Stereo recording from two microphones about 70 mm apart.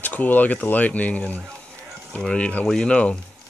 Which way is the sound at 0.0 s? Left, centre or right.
Left.